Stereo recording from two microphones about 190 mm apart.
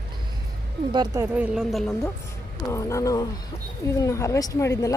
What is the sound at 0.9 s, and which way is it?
Speech, 20° right (ahead or behind).